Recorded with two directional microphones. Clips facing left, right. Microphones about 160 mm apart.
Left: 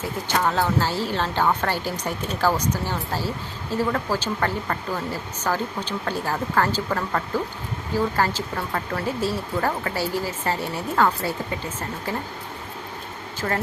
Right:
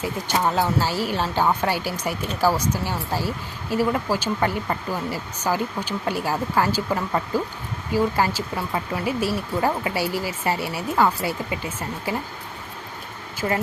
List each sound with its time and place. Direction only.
0.0 s speech: 15° right (ahead or behind)
13.4 s speech: 15° right (ahead or behind)